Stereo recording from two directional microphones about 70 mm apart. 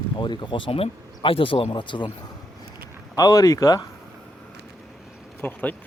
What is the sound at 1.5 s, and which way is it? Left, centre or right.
Speech, left.